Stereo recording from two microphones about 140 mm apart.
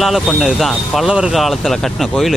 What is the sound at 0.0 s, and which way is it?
Speech, 5° right (ahead or behind).